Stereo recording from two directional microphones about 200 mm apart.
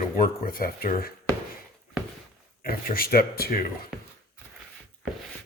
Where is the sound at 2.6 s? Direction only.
45° left (ahead or behind).